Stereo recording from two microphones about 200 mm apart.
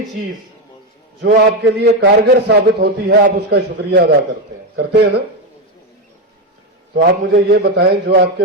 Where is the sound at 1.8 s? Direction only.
55° right (ahead or behind).